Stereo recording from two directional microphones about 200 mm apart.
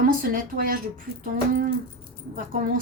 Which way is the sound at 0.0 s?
45° right (ahead or behind).